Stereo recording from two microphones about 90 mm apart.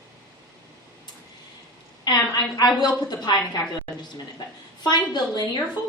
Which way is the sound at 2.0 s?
50° left (ahead or behind).